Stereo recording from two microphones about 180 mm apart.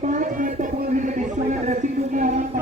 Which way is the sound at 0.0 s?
45° right (ahead or behind).